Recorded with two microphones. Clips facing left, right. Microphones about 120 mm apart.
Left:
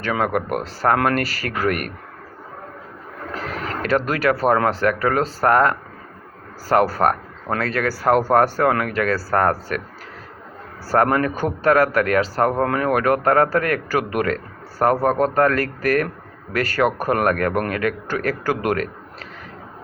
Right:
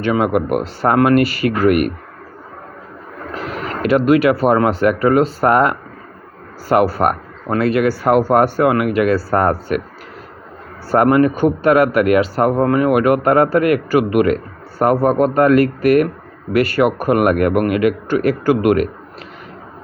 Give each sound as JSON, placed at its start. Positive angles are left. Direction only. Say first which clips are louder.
{"t": 0.0, "sound": "speech", "louder": "right 6 dB", "side_deg": -15}
{"t": 3.4, "sound": "speech", "louder": "right 6 dB", "side_deg": -15}
{"t": 10.9, "sound": "speech", "louder": "right 5 dB", "side_deg": -15}